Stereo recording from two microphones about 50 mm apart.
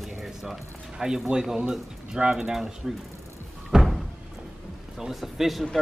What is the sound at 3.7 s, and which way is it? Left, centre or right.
Music, centre.